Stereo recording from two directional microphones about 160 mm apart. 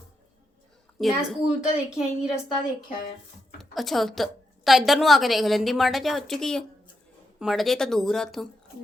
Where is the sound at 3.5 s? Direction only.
Centre (ahead or behind).